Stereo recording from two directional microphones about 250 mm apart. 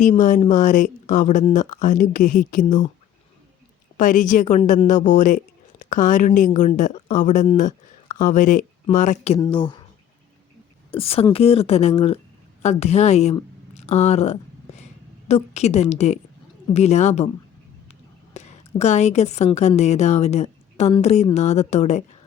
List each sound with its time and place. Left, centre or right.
0.2 s speech: left
3.9 s a woman's voice: left
10.9 s a woman's voice: left
18.3 s a woman's voice: left